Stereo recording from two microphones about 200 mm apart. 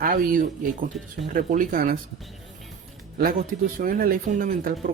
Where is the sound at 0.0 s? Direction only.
45° right (ahead or behind).